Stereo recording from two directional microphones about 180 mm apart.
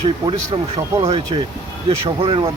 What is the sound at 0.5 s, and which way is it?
Speech, 25° right (ahead or behind).